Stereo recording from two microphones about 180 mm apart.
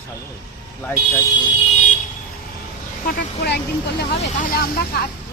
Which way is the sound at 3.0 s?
65° left (ahead or behind).